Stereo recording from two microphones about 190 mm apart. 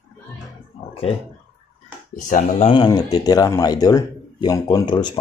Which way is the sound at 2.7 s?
20° left (ahead or behind).